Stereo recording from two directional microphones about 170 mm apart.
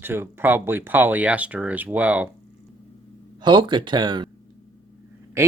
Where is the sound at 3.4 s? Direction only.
25° right (ahead or behind).